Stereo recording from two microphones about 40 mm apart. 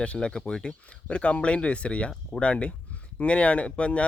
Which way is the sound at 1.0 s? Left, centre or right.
Left.